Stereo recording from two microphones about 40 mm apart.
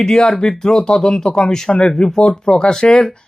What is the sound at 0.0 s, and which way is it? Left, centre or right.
Speech, centre.